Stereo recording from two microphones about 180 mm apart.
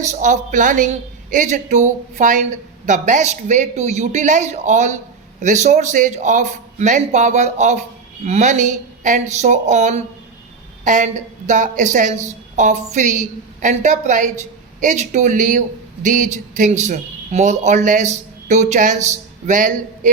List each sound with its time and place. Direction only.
0.1 s a man's voice: 45° right (ahead or behind)